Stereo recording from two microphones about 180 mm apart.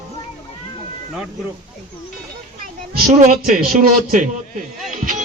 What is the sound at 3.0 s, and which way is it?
Speech, 50° right (ahead or behind).